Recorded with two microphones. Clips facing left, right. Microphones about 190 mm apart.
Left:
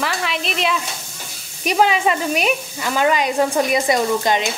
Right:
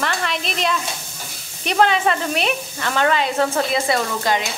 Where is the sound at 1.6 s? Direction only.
10° left (ahead or behind).